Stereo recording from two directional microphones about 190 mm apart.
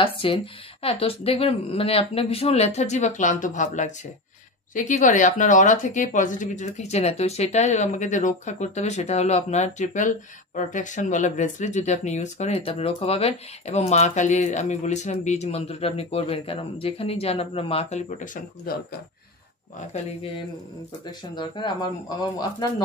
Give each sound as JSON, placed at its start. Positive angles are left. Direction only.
{"t": 0.0, "sound": "speech", "side_deg": 25}
{"t": 21.4, "sound": "speech", "side_deg": 25}